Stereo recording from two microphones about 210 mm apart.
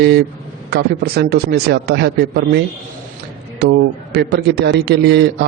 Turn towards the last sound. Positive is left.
turn(degrees=-55)  # may be behind; listen again after turning